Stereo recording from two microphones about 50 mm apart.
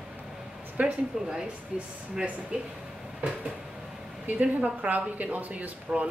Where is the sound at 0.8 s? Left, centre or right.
Right.